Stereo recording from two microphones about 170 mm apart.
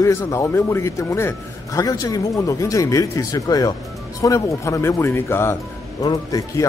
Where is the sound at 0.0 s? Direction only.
15° left (ahead or behind).